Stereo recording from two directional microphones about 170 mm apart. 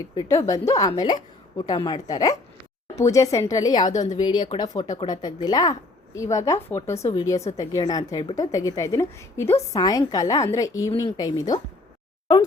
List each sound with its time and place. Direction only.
0.0 s a woman's voice: 20° left (ahead or behind)